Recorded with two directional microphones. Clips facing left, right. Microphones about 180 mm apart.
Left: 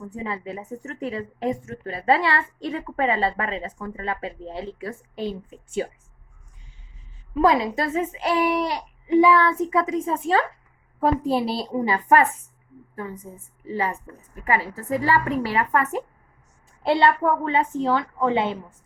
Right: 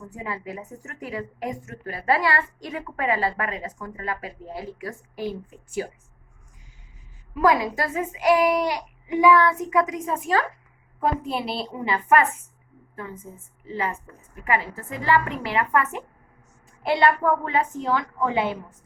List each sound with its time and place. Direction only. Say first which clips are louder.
0.1 s a woman's voice: left 2 dB; 25° left (ahead or behind)
7.3 s a woman's voice: left 1 dB; 25° left (ahead or behind)
13.7 s a woman's voice: left 2 dB; 35° left (ahead or behind)